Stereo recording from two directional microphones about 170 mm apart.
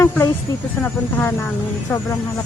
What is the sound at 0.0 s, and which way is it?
Speech, 15° left (ahead or behind).